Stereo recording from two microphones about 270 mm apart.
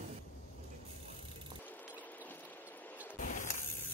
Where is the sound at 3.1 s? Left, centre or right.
Left.